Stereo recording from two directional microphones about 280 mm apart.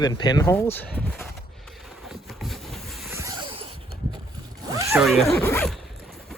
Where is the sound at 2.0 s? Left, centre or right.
Centre.